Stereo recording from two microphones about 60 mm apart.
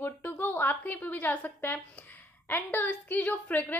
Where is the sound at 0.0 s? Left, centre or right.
Left.